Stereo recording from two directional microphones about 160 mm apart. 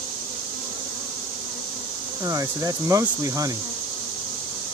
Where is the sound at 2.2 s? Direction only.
20° right (ahead or behind).